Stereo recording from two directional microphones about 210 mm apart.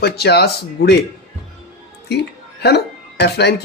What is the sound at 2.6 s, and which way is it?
Speech, 50° left (ahead or behind).